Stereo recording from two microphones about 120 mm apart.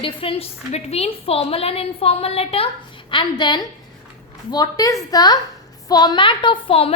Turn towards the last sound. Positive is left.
turn(degrees=55)  # may be behind; listen again after turning